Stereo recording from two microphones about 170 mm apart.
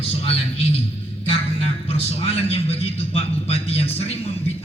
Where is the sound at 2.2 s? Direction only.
35° left (ahead or behind).